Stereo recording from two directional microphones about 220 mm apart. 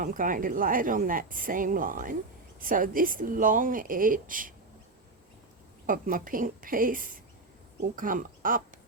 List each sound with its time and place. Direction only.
0.0 s a woman's voice: 40° right (ahead or behind)
5.8 s a woman's voice: 40° right (ahead or behind)